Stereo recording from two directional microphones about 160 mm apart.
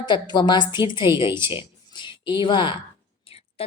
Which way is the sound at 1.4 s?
30° left (ahead or behind).